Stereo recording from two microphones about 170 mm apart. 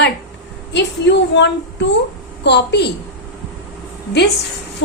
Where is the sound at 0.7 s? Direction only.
90° left.